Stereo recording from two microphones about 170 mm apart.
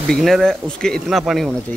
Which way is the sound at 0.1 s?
Centre (ahead or behind).